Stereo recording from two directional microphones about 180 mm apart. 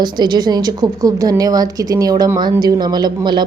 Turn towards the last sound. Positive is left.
turn(degrees=-25)  # may be behind; listen again after turning